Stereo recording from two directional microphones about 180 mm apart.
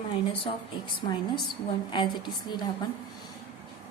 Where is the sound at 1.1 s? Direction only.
25° left (ahead or behind).